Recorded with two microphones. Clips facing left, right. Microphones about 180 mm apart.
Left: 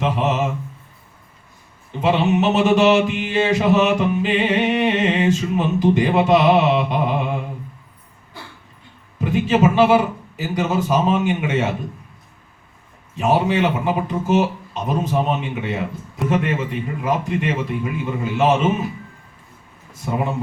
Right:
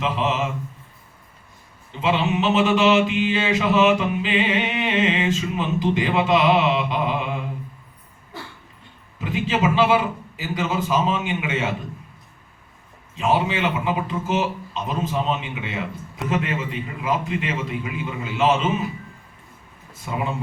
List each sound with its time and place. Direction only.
0.0 s speech: 50° left (ahead or behind)
2.0 s mantra: 55° left (ahead or behind)
9.3 s mantra: 50° left (ahead or behind)
13.1 s mantra: 55° left (ahead or behind)
20.1 s mantra: 50° left (ahead or behind)